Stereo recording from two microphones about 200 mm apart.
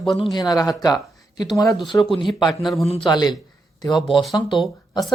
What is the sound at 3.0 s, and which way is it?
Speech, 20° left (ahead or behind).